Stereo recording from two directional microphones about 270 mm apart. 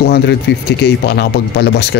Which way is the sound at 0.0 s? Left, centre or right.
Left.